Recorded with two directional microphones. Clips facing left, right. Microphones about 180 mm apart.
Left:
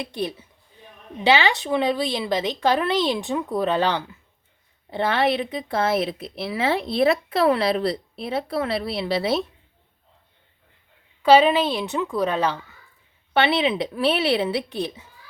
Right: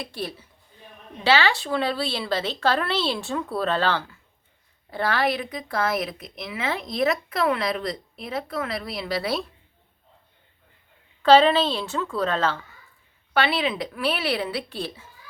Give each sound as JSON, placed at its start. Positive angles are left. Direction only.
{"t": 0.1, "sound": "speech", "side_deg": 20}
{"t": 11.2, "sound": "speech", "side_deg": 10}